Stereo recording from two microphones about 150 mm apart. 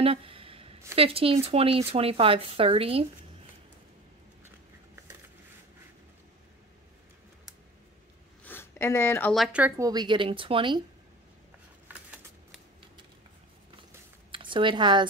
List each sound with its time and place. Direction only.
0.0 s a sound: 40° right (ahead or behind)
0.9 s speech: 40° right (ahead or behind)
8.5 s a sound: 15° left (ahead or behind)
9.3 s speech: centre (ahead or behind)
9.6 s speech: 20° right (ahead or behind)
14.3 s speech: 35° right (ahead or behind)